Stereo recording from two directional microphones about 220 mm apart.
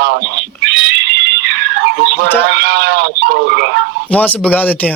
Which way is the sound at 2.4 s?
50° right (ahead or behind).